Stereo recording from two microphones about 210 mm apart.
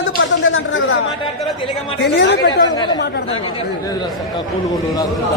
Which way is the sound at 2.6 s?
20° left (ahead or behind).